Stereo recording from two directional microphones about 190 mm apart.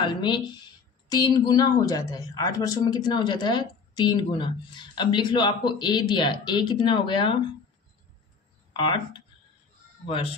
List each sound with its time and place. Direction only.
0.1 s speech: 25° left (ahead or behind)
10.0 s speech: 30° left (ahead or behind)